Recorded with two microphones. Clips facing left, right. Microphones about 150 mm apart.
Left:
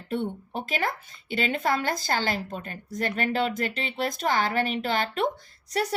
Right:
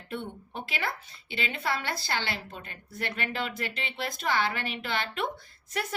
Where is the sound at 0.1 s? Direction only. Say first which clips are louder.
Left 7 dB; 45° left (ahead or behind).